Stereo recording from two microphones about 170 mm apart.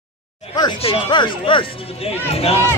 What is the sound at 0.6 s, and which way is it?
Speech, 30° left (ahead or behind).